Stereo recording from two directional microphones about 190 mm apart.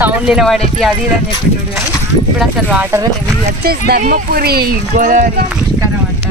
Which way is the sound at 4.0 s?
50° right (ahead or behind).